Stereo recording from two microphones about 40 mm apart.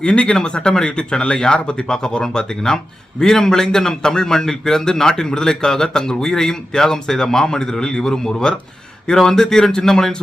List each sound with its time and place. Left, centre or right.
0.0 s a man's voice: left